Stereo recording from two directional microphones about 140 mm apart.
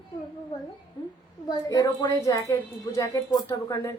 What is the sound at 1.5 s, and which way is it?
Speech, 25° left (ahead or behind).